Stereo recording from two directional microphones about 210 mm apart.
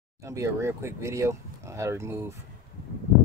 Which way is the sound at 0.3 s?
15° right (ahead or behind).